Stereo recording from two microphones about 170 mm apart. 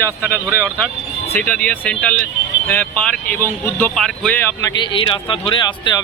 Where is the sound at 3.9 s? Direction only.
5° left (ahead or behind).